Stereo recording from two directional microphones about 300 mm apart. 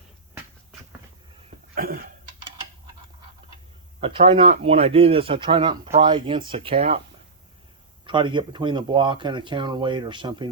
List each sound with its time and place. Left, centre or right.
1.5 s cough: right
4.0 s speech: centre
8.0 s speech: centre